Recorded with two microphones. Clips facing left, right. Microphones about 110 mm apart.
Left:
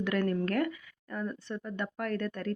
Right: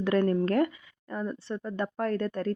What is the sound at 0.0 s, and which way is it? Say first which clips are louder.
Speech: right 5 dB; 30° right (ahead or behind).